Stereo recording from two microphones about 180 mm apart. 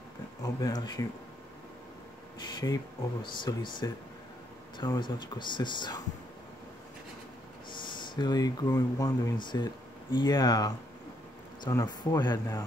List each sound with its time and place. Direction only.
0.4 s speech: 20° left (ahead or behind)
2.3 s speech: 20° left (ahead or behind)
7.7 s speech: 25° left (ahead or behind)